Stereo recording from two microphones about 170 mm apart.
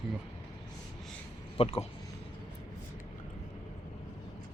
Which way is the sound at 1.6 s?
35° left (ahead or behind).